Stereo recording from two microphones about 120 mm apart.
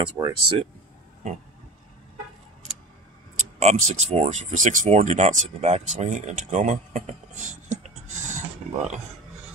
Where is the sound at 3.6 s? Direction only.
65° right (ahead or behind); by 8.4 s 80° right.